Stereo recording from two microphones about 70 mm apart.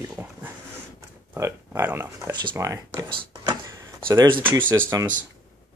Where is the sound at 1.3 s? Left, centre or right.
Right.